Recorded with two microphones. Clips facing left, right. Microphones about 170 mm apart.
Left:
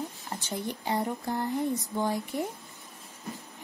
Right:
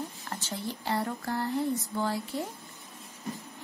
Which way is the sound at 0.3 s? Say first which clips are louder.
Left 3 dB; 15° left (ahead or behind).